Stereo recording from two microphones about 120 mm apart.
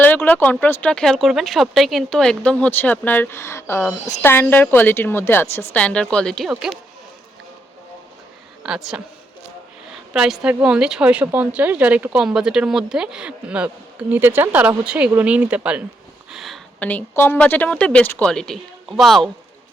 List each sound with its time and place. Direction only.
0.0 s speech: 15° left (ahead or behind)
8.6 s speech: 5° right (ahead or behind)
10.1 s a woman's voice: 5° right (ahead or behind)
16.3 s a sound: centre (ahead or behind)
16.8 s speech: 15° left (ahead or behind)